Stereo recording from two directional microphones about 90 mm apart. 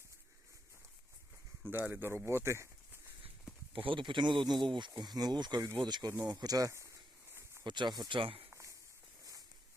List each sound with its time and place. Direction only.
1.6 s speech: 20° right (ahead or behind)
3.7 s speech: 75° right (ahead or behind); by 6.1 s 50° right (ahead or behind)
6.3 s a sound: 45° right (ahead or behind)
7.6 s speech: 55° right (ahead or behind)
8.2 s speech: 90° right